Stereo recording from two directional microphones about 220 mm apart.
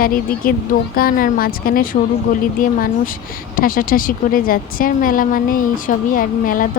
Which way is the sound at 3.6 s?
40° left (ahead or behind).